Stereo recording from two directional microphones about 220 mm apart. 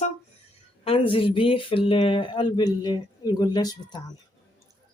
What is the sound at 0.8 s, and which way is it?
Speech, 25° left (ahead or behind).